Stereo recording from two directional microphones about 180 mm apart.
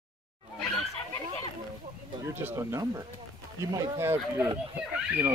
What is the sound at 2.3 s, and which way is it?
Speech, 15° right (ahead or behind).